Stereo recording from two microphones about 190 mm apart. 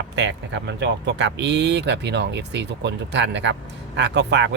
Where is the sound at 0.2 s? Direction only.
70° right (ahead or behind).